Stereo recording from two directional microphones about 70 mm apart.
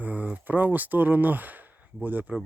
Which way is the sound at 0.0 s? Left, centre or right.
Right.